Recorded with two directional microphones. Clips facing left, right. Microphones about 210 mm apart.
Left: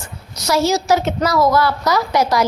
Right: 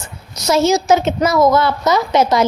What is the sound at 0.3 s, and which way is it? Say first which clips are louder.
A woman's voice: right 3 dB; 20° right (ahead or behind).